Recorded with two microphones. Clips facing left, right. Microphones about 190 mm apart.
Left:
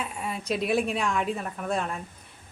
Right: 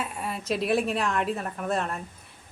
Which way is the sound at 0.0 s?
Centre (ahead or behind).